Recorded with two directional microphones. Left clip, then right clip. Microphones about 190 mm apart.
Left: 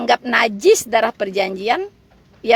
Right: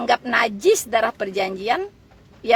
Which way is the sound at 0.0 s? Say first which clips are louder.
Left 3 dB; 30° left (ahead or behind).